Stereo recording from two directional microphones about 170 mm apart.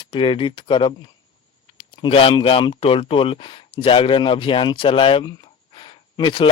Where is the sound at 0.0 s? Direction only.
30° left (ahead or behind).